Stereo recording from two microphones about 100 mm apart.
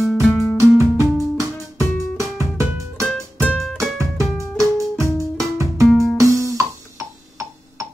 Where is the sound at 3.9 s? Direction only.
30° right (ahead or behind).